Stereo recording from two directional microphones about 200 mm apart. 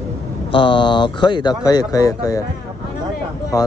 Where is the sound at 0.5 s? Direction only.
25° left (ahead or behind).